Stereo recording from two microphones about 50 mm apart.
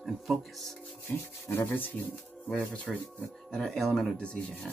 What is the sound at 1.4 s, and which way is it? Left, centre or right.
Sanding, left.